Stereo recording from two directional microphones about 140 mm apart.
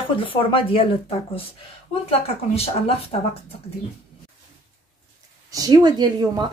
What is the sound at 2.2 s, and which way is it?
Speech, 45° left (ahead or behind).